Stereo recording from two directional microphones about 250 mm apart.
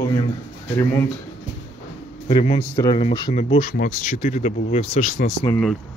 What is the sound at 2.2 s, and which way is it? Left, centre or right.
Speech, left.